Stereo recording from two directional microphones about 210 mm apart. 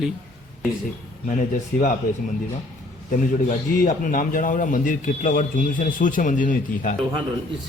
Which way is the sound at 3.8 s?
40° left (ahead or behind).